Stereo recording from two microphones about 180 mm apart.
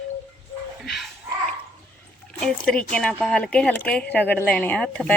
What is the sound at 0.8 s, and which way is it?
Dog, centre (ahead or behind).